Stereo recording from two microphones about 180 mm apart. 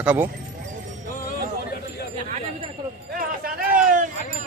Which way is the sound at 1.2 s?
55° left (ahead or behind).